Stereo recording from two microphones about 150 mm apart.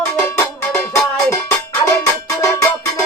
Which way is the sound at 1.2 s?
20° left (ahead or behind).